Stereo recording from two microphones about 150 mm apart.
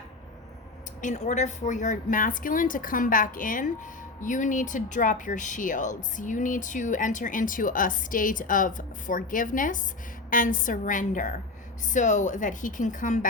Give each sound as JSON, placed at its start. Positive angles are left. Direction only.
{"t": 1.0, "sound": "a woman's voice", "side_deg": 50}